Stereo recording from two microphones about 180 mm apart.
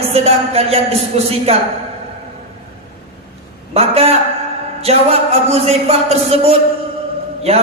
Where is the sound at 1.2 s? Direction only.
35° right (ahead or behind).